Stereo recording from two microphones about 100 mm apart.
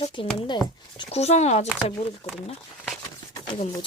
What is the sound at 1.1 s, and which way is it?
Speech, 90° left.